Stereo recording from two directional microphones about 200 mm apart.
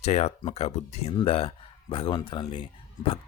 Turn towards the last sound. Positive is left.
turn(degrees=25)  # may be behind; listen again after turning